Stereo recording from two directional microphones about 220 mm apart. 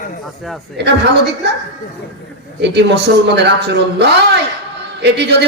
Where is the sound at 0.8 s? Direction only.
50° right (ahead or behind).